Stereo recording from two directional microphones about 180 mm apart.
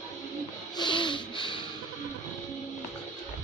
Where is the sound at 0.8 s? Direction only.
25° left (ahead or behind).